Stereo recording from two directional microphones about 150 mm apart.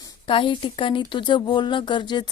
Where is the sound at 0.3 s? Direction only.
35° left (ahead or behind).